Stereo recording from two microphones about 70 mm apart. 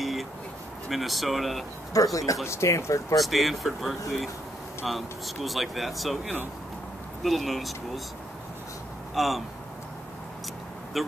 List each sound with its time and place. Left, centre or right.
0.0 s a sound: centre
0.8 s speech: centre
2.0 s speech: left
3.2 s speech: centre
9.1 s speech: centre
10.9 s speech: centre